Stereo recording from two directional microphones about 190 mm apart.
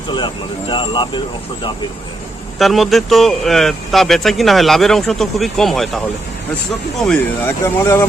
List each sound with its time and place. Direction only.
0.7 s speech: 25° left (ahead or behind)
2.6 s speech: centre (ahead or behind)
7.0 s speech: 5° left (ahead or behind)
7.6 s speech: 15° left (ahead or behind)